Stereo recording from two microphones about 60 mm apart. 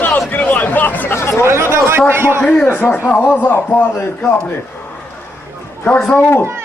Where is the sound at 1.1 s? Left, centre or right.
Left.